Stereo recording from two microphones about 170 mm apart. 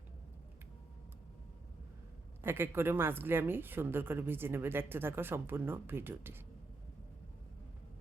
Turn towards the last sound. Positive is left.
turn(degrees=-15)  # may be behind; listen again after turning